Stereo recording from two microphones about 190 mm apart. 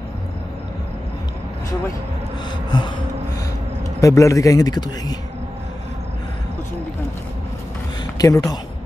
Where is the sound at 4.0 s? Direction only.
15° left (ahead or behind).